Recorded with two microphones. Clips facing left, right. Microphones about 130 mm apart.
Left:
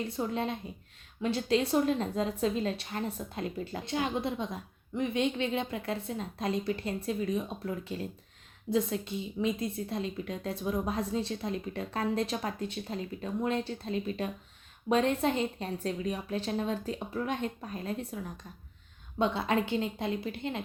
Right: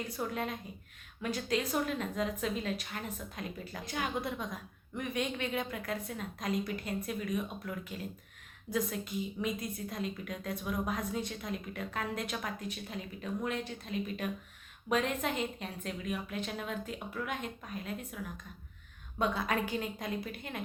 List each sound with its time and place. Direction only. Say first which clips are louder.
0.0 s a woman's voice: left 4 dB; 25° left (ahead or behind)